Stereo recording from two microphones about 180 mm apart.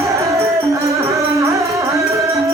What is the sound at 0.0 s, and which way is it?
Music, 15° right (ahead or behind).